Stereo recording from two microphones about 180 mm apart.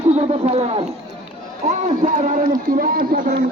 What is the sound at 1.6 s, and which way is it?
A man's voice, 40° right (ahead or behind).